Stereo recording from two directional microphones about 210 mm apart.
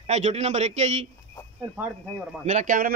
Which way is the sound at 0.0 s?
30° right (ahead or behind).